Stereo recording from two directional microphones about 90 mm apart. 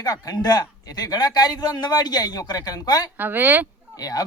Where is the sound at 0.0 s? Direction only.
45° left (ahead or behind).